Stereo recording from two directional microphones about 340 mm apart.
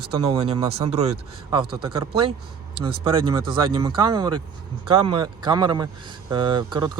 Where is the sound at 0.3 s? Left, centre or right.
Centre.